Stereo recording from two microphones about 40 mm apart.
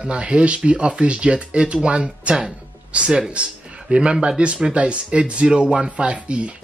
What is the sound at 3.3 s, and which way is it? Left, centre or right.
Speech, right.